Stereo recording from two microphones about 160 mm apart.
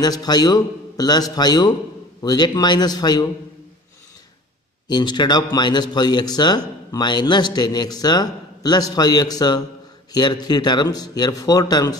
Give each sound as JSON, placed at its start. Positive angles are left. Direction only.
{"t": 0.0, "sound": "speech", "side_deg": 25}
{"t": 4.8, "sound": "speech", "side_deg": 30}